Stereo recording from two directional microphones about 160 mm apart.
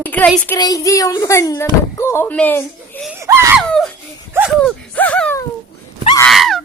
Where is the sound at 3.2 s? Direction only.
15° right (ahead or behind).